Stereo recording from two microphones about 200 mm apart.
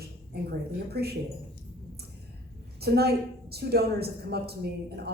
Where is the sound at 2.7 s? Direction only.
50° right (ahead or behind).